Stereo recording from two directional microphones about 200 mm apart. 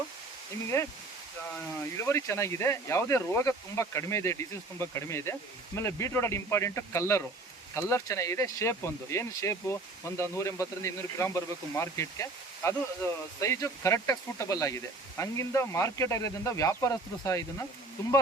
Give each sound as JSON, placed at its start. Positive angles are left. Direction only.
{"t": 0.7, "sound": "speech", "side_deg": 15}